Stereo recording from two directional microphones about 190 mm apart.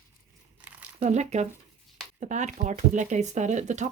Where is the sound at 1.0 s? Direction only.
35° right (ahead or behind).